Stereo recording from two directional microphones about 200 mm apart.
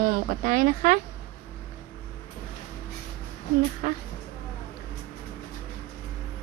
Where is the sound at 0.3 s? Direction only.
40° right (ahead or behind).